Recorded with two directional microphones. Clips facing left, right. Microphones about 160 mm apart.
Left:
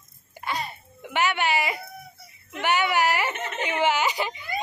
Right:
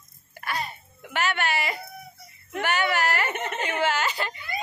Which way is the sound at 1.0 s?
15° left (ahead or behind).